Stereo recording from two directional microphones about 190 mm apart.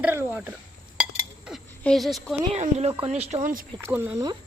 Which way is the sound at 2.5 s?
35° right (ahead or behind).